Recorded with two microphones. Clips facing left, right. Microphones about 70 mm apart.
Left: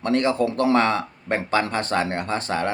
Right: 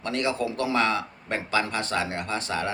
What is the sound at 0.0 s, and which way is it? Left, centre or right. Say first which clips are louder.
Speech: left 6 dB; left.